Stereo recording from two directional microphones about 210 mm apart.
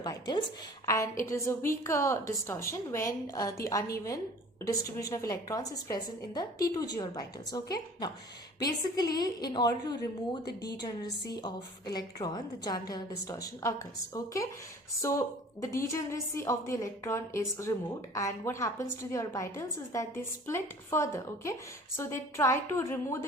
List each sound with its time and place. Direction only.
0.0 s a woman's voice: 20° left (ahead or behind)
15.6 s a woman's voice: 15° left (ahead or behind)